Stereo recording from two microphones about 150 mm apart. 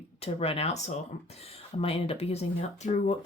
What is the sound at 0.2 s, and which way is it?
Speech, 45° left (ahead or behind).